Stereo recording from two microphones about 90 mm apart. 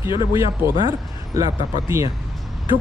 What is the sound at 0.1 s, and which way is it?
Speech, 70° left (ahead or behind).